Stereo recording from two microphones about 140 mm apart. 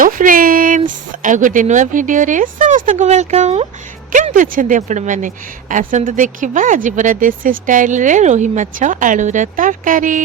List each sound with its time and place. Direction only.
0.0 s speech: 80° right; by 3.7 s 50° right (ahead or behind)
4.1 s speech: 70° right (ahead or behind)